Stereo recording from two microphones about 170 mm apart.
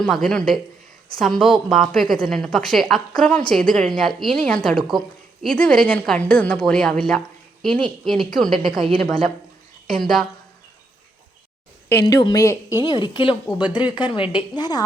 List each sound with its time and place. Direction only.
0.0 s a woman's voice: centre (ahead or behind)
11.9 s a woman's voice: 20° left (ahead or behind)